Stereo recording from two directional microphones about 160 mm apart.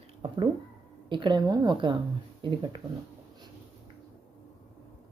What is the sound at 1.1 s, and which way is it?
A woman's voice, 30° right (ahead or behind).